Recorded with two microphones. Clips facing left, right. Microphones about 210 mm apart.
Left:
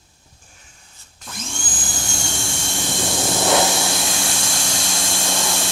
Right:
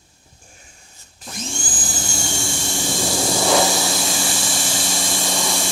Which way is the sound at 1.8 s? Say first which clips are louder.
Even; centre (ahead or behind).